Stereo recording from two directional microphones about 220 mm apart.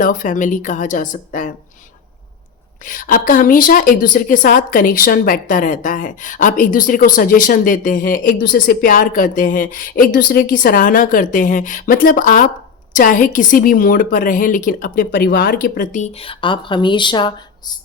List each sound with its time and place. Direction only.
0.0 s a woman's voice: 35° left (ahead or behind)
2.8 s a woman's voice: 40° left (ahead or behind); by 17.7 s 20° left (ahead or behind)